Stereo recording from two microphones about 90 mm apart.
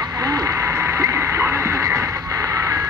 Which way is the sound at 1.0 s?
30° right (ahead or behind).